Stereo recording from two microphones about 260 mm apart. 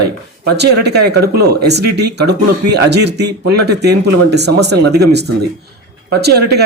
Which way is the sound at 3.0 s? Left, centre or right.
Right.